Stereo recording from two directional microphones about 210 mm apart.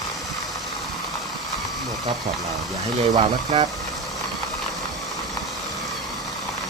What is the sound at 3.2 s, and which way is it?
Speech, 25° right (ahead or behind).